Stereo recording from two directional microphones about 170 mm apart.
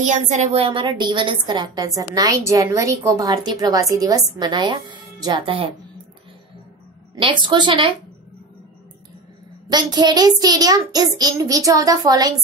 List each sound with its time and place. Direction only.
0.0 s child singing: 45° right (ahead or behind)
7.2 s child singing: 30° right (ahead or behind)
9.7 s child singing: 25° right (ahead or behind)